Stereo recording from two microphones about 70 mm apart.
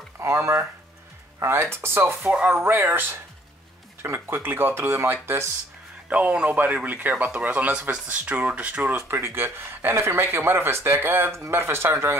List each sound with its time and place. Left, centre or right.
0.2 s speech: right
6.0 s speech: right